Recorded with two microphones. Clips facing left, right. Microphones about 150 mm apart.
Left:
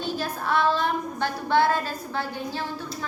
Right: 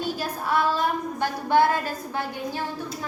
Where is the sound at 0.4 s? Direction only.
10° right (ahead or behind).